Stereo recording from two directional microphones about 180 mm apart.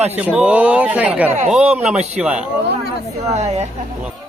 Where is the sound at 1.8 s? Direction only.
40° right (ahead or behind).